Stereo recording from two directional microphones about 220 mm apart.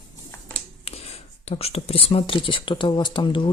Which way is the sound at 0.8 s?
25° left (ahead or behind).